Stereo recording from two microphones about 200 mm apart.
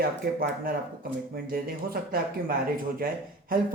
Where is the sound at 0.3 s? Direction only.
45° right (ahead or behind).